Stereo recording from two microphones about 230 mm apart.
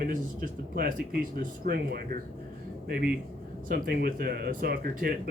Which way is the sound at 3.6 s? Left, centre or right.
Right.